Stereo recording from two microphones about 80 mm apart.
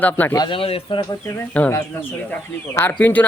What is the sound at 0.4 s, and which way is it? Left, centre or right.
Speech, left.